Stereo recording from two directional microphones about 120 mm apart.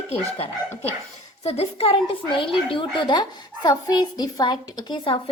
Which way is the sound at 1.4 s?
60° left (ahead or behind).